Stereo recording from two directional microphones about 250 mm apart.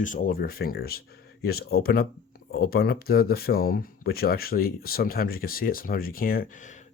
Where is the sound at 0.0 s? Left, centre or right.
Left.